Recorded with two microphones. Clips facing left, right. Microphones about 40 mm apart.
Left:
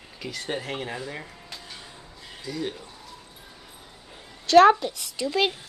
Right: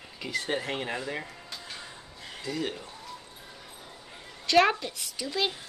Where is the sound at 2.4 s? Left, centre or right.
Right.